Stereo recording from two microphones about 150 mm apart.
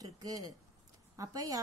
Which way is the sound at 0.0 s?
25° right (ahead or behind).